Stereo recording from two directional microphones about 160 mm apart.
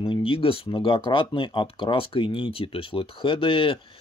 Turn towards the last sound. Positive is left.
turn(degrees=35)  # may be behind; listen again after turning